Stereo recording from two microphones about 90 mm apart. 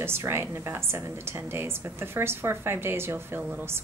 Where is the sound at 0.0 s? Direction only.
25° right (ahead or behind).